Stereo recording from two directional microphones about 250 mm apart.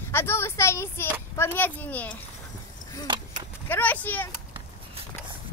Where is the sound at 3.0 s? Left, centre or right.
Centre.